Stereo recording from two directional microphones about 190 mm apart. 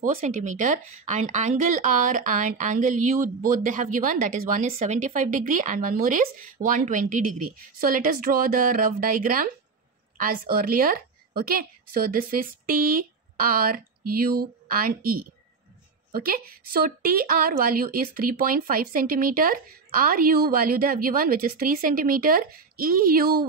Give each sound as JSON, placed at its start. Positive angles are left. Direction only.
{"t": 0.0, "sound": "a woman's voice", "side_deg": -40}